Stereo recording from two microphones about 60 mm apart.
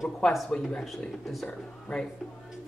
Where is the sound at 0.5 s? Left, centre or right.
Centre.